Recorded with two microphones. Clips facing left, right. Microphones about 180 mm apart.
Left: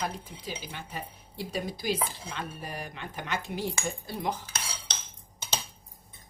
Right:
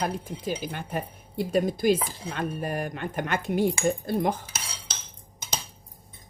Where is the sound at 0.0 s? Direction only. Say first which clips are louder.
Right 6 dB; 50° right (ahead or behind).